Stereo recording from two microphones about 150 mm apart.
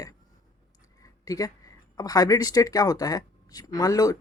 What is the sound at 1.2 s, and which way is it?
Speech, 25° left (ahead or behind).